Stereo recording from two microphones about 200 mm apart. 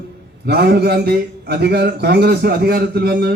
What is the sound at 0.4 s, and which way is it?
A man's voice, 55° right (ahead or behind).